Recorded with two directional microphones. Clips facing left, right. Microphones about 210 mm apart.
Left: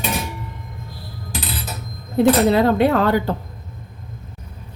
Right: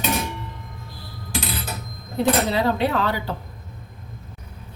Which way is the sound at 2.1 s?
50° left (ahead or behind).